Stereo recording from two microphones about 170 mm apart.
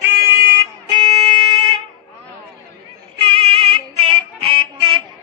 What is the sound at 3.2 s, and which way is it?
Female singing, 30° right (ahead or behind).